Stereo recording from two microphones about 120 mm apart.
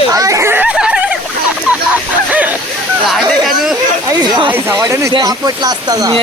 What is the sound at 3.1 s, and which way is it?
Speech, centre (ahead or behind).